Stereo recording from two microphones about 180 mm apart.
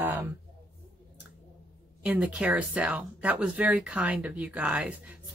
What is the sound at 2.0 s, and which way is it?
Speech, 5° right (ahead or behind).